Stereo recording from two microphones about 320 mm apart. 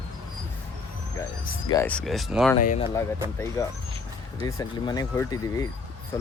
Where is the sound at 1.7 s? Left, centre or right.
Centre.